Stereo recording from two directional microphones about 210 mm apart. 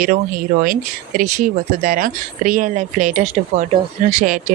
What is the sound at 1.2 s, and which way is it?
Speech, 35° right (ahead or behind).